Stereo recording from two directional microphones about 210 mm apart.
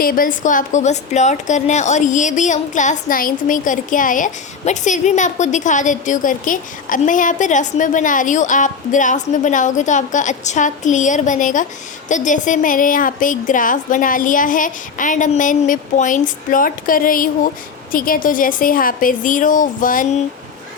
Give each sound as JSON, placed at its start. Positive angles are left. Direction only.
{"t": 0.0, "sound": "a woman's voice", "side_deg": 40}